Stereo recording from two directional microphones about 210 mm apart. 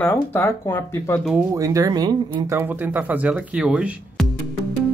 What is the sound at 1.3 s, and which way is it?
Speech, 15° right (ahead or behind).